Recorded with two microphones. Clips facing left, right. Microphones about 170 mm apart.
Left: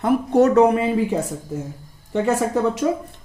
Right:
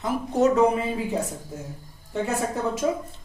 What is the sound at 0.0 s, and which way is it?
Speech, 60° left (ahead or behind).